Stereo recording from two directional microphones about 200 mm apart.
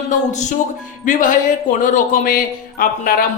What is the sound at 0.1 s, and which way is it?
Speech, 35° left (ahead or behind).